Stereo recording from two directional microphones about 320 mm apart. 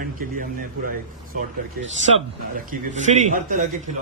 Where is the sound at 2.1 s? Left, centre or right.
Right.